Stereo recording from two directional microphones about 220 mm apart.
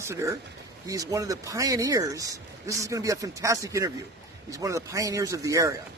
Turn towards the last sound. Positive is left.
turn(degrees=-15)  # may be behind; listen again after turning